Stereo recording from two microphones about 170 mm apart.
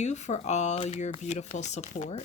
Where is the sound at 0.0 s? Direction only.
40° left (ahead or behind).